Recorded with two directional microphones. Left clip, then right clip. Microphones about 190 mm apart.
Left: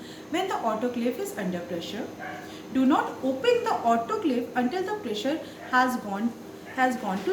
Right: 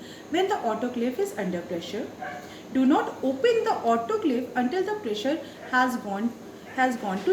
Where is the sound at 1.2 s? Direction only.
15° left (ahead or behind).